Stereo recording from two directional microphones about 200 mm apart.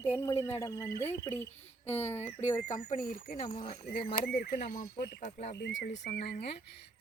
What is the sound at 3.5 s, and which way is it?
Speech, 25° left (ahead or behind).